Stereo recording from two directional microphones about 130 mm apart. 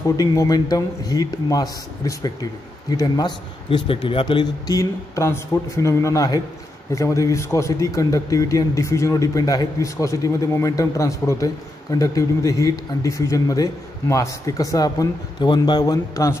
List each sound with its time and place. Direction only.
0.0 s speech: 25° left (ahead or behind)